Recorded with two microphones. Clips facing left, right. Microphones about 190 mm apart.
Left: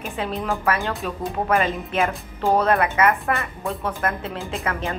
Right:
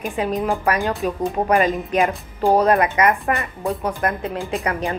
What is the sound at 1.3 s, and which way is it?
Speech, 35° right (ahead or behind).